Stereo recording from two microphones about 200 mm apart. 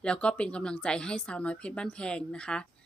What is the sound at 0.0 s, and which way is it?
A woman's voice, 5° left (ahead or behind).